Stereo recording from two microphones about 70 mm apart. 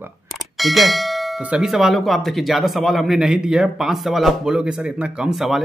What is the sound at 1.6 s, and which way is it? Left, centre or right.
A man's voice, centre.